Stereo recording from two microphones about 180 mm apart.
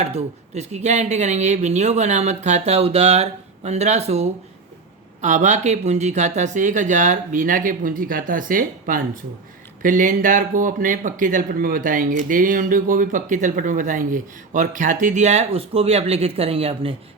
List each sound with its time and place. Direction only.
0.0 s speech: 35° right (ahead or behind)